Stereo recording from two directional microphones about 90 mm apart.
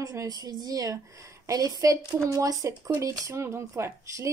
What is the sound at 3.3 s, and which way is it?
A woman's voice, 30° right (ahead or behind).